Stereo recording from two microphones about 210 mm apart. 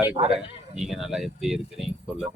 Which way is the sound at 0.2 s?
20° right (ahead or behind).